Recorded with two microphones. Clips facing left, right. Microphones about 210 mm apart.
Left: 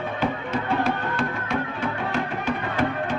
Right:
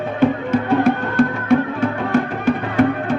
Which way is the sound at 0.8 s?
55° right (ahead or behind).